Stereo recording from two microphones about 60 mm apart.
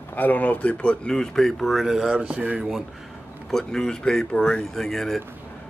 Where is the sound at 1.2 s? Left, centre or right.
Centre.